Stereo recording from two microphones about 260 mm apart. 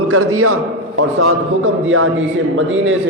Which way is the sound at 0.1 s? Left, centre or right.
Right.